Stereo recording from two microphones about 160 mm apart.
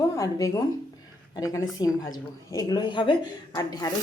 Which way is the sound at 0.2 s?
20° left (ahead or behind).